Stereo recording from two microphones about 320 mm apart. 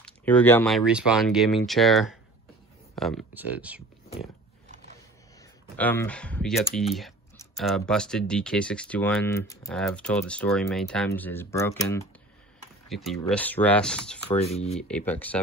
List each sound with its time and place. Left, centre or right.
0.0 s speech: centre
5.8 s speech: centre
14.4 s speech: centre
14.8 s speech: centre